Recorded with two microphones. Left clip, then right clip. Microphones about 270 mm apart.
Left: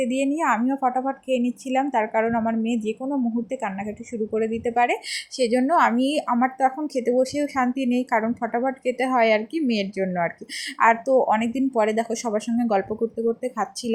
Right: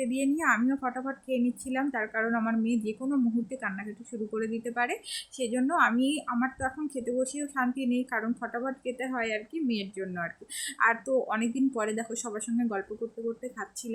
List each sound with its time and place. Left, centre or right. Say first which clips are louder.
0.0 s a woman's voice: left 6 dB; centre